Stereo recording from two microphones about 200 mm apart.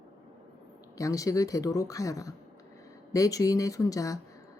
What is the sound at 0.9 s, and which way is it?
Speech, 15° left (ahead or behind).